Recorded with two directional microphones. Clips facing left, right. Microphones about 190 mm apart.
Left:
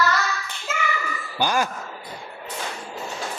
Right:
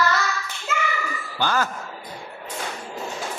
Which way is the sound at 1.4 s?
15° left (ahead or behind).